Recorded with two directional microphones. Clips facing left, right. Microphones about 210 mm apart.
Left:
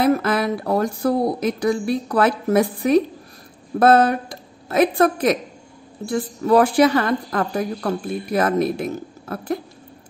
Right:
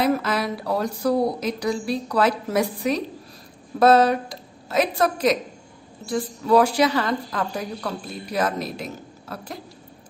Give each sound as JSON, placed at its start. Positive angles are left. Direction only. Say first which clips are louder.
{"t": 0.0, "sound": "a woman's voice", "louder": "left 4 dB", "side_deg": 55}